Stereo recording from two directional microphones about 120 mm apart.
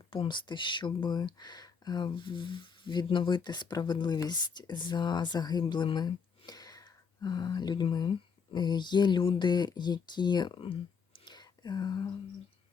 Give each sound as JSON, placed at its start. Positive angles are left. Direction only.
{"t": 0.1, "sound": "speech", "side_deg": 45}